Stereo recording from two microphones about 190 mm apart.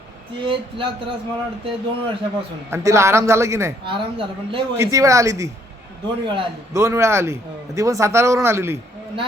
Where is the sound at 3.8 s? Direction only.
25° right (ahead or behind).